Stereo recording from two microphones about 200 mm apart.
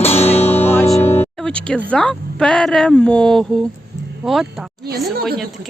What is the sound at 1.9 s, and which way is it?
A woman's voice, 5° left (ahead or behind).